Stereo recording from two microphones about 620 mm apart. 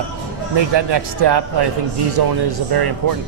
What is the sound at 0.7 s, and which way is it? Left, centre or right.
Speech, right.